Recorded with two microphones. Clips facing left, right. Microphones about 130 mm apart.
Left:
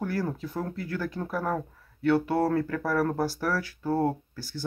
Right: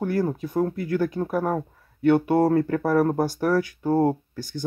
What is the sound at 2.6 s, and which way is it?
Speech, 40° right (ahead or behind).